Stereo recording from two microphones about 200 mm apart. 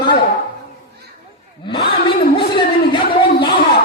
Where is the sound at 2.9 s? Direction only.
25° left (ahead or behind).